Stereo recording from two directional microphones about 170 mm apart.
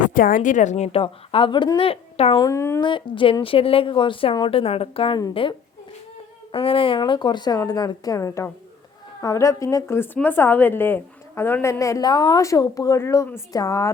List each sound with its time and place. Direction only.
0.0 s a woman's voice: 50° left (ahead or behind); by 2.4 s 35° left (ahead or behind)
2.4 s a woman's voice: 15° left (ahead or behind)
2.8 s a woman's voice: 30° left (ahead or behind)